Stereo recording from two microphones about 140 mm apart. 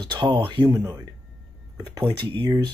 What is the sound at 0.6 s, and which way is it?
Speech, 25° right (ahead or behind).